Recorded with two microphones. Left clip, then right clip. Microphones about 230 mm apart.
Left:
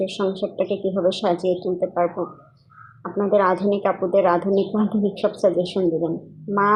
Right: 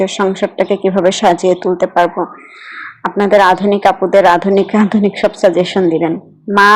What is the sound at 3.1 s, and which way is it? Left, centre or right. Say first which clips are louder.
A woman's voice: right 9 dB; right.